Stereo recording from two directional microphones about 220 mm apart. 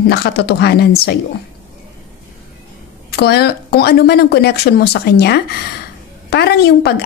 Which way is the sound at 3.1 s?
50° left (ahead or behind).